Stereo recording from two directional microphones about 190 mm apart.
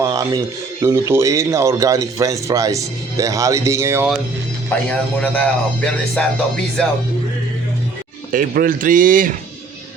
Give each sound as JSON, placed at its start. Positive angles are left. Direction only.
{"t": 0.0, "sound": "speech", "side_deg": -15}
{"t": 4.9, "sound": "a man's voice", "side_deg": 5}
{"t": 8.3, "sound": "a man's voice", "side_deg": -45}